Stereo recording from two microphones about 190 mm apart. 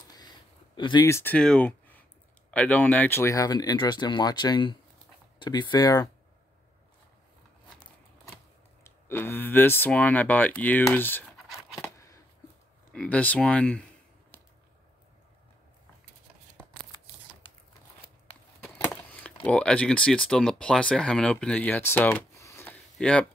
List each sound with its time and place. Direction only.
0.7 s speech: 25° left (ahead or behind)
8.8 s speech: 10° left (ahead or behind)
11.3 s a sound: centre (ahead or behind)
11.8 s chopping: 15° left (ahead or behind)
12.9 s speech: 5° left (ahead or behind)
18.6 s a sound: 10° left (ahead or behind)
19.4 s speech: 5° left (ahead or behind)